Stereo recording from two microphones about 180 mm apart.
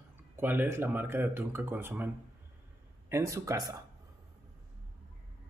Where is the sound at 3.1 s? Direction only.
15° right (ahead or behind).